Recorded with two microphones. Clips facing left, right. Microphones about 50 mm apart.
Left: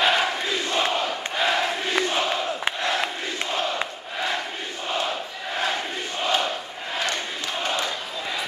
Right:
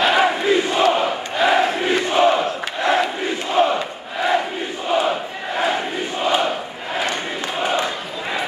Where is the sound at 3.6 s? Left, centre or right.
Centre.